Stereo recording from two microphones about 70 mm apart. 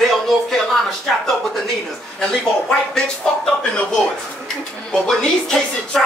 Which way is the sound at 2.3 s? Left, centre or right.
Centre.